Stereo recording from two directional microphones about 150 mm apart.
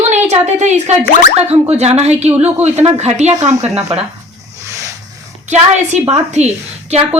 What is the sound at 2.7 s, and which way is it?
Speech, 45° right (ahead or behind).